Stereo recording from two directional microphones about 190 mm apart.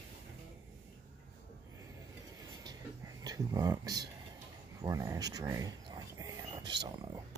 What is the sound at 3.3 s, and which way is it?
Speech, 20° right (ahead or behind).